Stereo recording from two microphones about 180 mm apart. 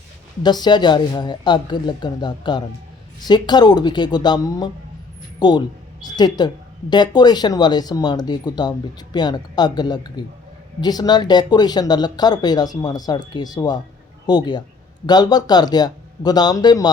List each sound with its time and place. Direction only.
0.4 s speech: 25° left (ahead or behind)